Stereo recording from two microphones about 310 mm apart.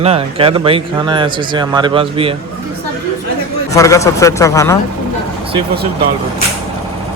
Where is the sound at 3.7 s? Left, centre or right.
Centre.